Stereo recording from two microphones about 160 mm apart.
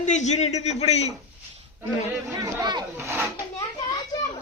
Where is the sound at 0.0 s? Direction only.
50° left (ahead or behind).